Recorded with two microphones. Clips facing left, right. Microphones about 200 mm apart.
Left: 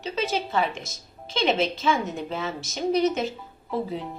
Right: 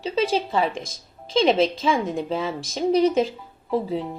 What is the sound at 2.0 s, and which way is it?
Speech, 30° right (ahead or behind).